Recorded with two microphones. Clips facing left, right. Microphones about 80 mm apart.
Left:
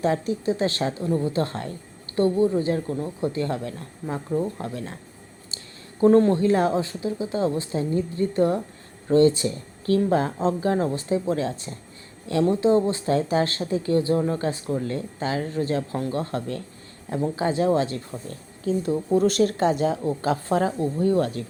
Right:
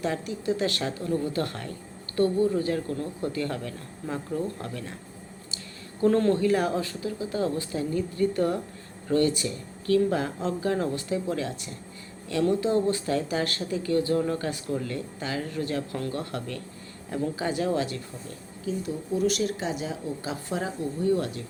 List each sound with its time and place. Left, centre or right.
0.0 s speech: left
6.0 s speech: left
18.3 s speech: left